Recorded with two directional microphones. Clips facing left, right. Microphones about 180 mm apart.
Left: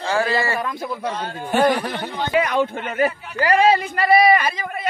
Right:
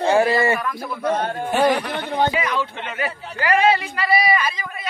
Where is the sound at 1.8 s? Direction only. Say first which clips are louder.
Right 4 dB; 40° left (ahead or behind).